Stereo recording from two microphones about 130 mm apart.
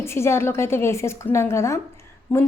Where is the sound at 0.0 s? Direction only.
20° left (ahead or behind).